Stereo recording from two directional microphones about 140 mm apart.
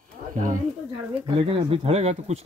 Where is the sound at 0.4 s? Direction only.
70° right (ahead or behind).